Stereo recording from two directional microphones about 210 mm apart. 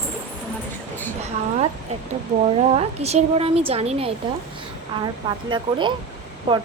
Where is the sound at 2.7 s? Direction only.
30° right (ahead or behind).